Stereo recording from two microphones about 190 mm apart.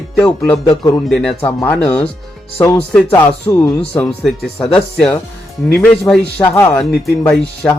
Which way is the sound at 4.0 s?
Centre (ahead or behind).